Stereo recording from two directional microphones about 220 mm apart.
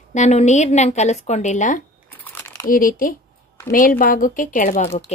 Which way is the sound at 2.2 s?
10° left (ahead or behind).